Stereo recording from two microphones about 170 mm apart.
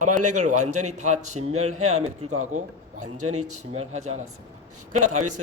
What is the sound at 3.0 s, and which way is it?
A man's voice, 40° right (ahead or behind).